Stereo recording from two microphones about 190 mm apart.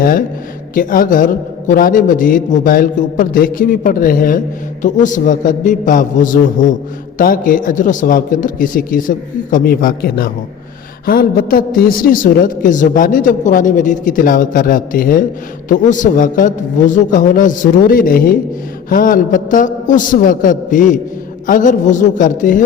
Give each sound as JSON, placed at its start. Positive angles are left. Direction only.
{"t": 0.7, "sound": "a man's voice", "side_deg": 45}